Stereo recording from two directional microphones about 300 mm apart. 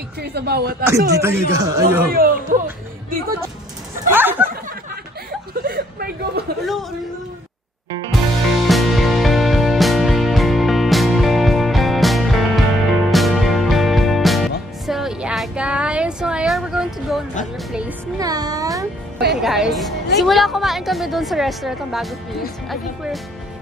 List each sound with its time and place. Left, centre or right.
0.2 s a woman's voice: right
1.1 s speech: centre
4.1 s a sound: centre
5.5 s a sound: right
8.1 s music: centre
19.3 s a woman's voice: centre